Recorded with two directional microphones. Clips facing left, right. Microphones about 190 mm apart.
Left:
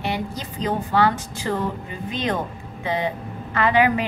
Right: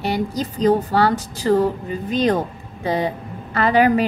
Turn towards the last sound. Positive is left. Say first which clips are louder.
# right 3 dB
turn(degrees=-40)  # may be behind; listen again after turning